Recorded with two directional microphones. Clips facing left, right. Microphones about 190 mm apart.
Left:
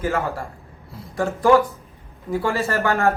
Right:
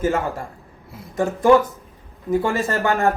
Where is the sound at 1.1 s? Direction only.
20° right (ahead or behind).